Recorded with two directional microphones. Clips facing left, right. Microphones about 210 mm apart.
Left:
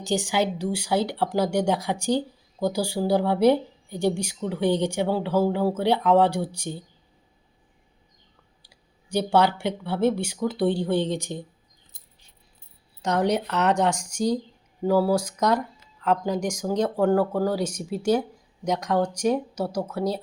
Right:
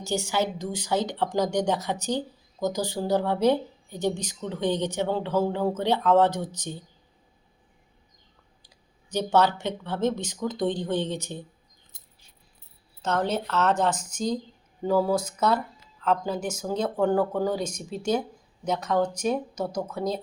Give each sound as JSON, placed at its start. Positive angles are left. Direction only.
{"t": 0.0, "sound": "a woman's voice", "side_deg": 15}
{"t": 8.6, "sound": "a woman's voice", "side_deg": 10}
{"t": 13.0, "sound": "a woman's voice", "side_deg": 15}